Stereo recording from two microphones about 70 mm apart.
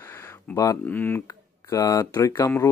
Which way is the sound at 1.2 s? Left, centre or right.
Left.